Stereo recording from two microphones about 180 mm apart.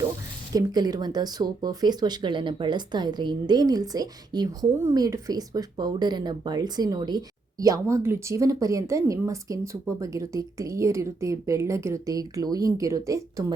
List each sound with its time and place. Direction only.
0.5 s a woman's voice: 20° right (ahead or behind)